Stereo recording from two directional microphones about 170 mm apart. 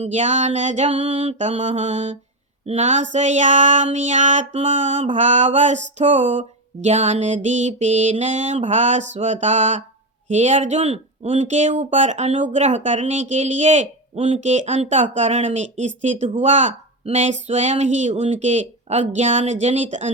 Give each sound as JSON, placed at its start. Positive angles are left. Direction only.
{"t": 0.0, "sound": "speech", "side_deg": -45}